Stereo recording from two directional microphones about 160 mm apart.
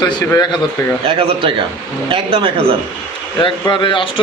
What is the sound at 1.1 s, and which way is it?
Speech, 30° right (ahead or behind).